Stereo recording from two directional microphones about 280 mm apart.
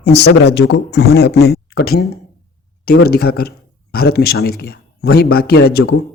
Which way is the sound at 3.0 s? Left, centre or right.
Left.